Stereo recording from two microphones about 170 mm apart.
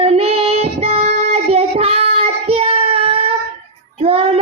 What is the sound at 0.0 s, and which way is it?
Child singing, 35° right (ahead or behind).